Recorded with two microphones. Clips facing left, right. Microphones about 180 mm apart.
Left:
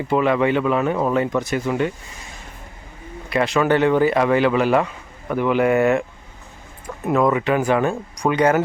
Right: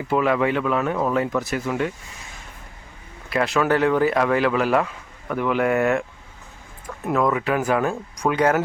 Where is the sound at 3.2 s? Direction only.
Centre (ahead or behind).